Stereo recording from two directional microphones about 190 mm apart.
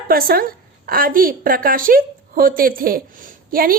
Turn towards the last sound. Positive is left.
turn(degrees=-50)  # may be behind; listen again after turning